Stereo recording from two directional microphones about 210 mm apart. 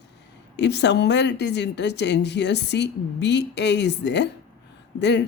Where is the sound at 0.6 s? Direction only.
55° left (ahead or behind).